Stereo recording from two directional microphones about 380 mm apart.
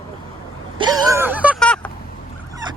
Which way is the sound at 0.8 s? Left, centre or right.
Centre.